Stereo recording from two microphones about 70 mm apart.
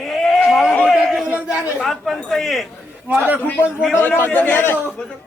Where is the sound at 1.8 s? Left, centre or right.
Centre.